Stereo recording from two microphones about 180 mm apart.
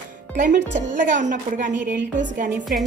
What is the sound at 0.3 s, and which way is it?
A woman's voice, 45° right (ahead or behind).